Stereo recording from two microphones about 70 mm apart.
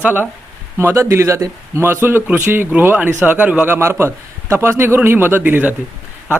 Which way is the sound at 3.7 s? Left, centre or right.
Right.